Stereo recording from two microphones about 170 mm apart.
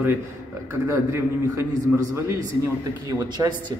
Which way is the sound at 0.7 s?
15° right (ahead or behind).